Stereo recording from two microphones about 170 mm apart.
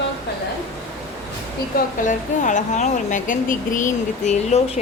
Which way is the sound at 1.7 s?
50° left (ahead or behind).